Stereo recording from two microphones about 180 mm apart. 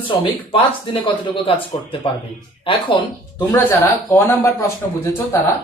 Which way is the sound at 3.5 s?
10° left (ahead or behind).